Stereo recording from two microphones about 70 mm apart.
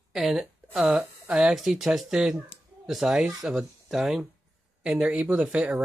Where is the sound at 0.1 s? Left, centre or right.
Centre.